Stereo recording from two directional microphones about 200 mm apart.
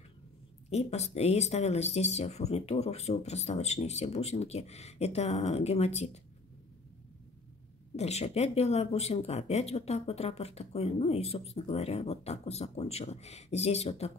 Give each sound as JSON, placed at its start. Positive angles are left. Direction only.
{"t": 0.7, "sound": "speech", "side_deg": 35}
{"t": 7.9, "sound": "speech", "side_deg": 30}